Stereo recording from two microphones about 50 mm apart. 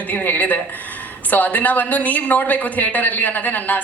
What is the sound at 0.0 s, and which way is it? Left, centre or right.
Speech, left.